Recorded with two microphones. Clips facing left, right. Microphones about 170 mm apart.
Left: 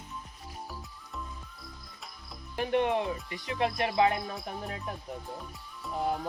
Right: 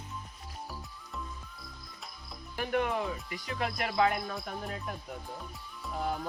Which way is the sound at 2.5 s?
25° left (ahead or behind).